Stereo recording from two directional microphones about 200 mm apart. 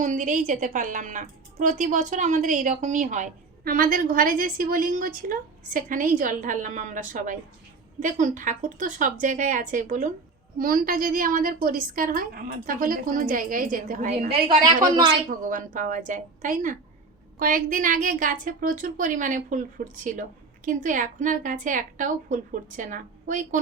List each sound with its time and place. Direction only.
0.0 s a woman's voice: 40° right (ahead or behind)
15.3 s a woman's voice: 40° right (ahead or behind)